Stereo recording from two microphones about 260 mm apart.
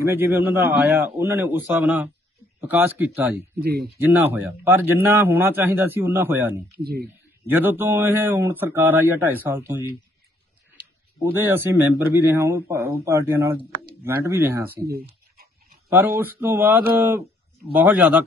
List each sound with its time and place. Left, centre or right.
0.0 s a man's voice: centre
3.6 s speech: right
4.0 s a man's voice: centre
6.8 s speech: right
7.4 s a man's voice: centre
11.3 s a man's voice: centre
14.8 s speech: right
16.2 s a man's voice: centre